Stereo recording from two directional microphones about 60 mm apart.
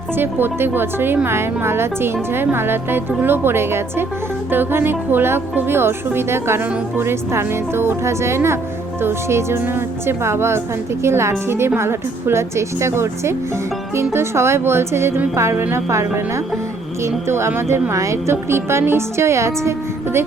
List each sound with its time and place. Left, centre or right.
0.2 s a woman's voice: right
17.9 s speech: right